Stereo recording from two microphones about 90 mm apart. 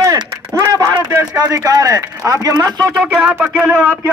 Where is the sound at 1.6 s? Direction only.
45° right (ahead or behind).